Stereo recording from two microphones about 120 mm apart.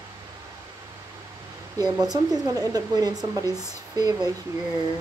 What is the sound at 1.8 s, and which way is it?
A woman's voice, 30° right (ahead or behind).